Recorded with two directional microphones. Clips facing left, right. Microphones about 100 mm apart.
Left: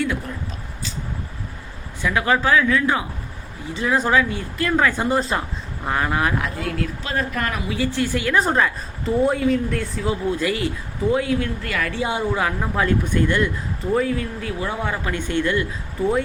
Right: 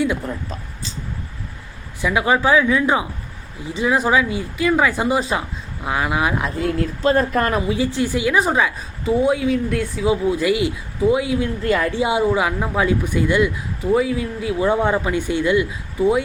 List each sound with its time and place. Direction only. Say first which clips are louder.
2.0 s a woman's voice: right 2 dB; 15° right (ahead or behind)
6.4 s speech: right 4 dB; 30° right (ahead or behind)
7.9 s a woman's voice: even; 15° right (ahead or behind)
11.6 s a woman's voice: right 6 dB; 25° right (ahead or behind); by 14.5 s 10° right (ahead or behind)
14.6 s a woman's voice: right 8 dB; 25° right (ahead or behind); by 16.2 s 5° right (ahead or behind)